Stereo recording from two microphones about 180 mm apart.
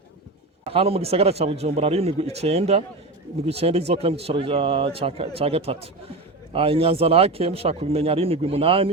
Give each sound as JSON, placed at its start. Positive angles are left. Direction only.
{"t": 0.6, "sound": "speech", "side_deg": -35}